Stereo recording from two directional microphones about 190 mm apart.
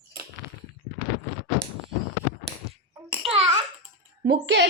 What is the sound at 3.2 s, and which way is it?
Babbling, 30° right (ahead or behind).